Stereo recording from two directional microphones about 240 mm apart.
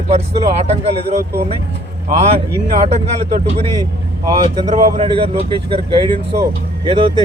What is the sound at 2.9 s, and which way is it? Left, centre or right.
Speech, right.